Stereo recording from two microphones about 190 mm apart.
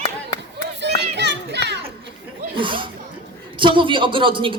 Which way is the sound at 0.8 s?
65° right (ahead or behind).